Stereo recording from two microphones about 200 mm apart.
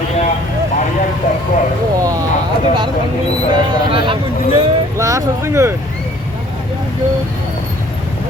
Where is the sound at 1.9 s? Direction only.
15° right (ahead or behind).